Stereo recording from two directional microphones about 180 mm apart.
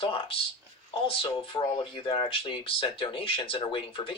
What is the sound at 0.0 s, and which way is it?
Speech, 30° left (ahead or behind).